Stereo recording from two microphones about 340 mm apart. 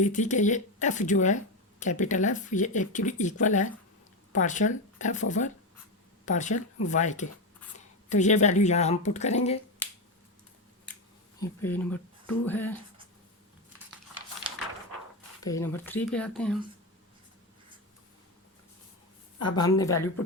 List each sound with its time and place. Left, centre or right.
0.0 s speech: left
11.3 s speech: centre
15.4 s speech: centre
19.5 s a woman's voice: centre